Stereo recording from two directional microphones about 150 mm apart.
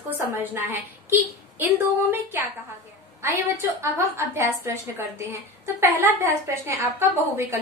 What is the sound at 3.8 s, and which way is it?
A woman's voice, 15° right (ahead or behind).